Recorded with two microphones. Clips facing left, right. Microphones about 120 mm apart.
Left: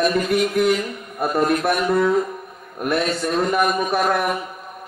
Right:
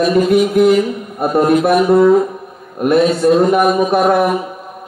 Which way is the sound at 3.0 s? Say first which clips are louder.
Right 11 dB; centre (ahead or behind).